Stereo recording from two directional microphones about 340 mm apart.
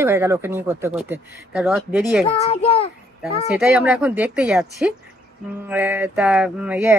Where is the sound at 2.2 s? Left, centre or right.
Centre.